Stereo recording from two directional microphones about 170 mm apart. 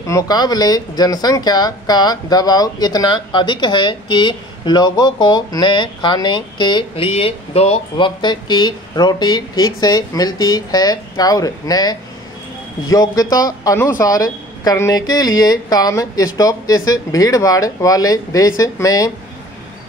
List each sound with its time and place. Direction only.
0.0 s speech: 20° left (ahead or behind)